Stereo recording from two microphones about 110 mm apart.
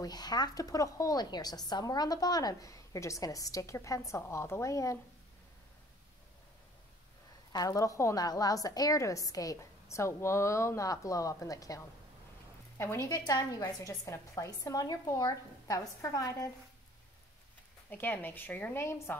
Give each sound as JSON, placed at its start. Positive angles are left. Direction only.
{"t": 0.0, "sound": "speech", "side_deg": 40}
{"t": 7.5, "sound": "a woman's voice", "side_deg": 30}
{"t": 17.8, "sound": "a woman's voice", "side_deg": 15}